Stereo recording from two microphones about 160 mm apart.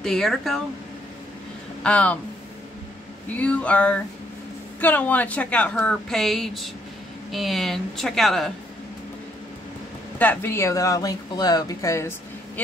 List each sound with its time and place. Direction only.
0.0 s a woman's voice: 5° left (ahead or behind)
1.8 s speech: 5° left (ahead or behind)
3.3 s a woman's voice: 10° left (ahead or behind)
10.1 s speech: 10° left (ahead or behind)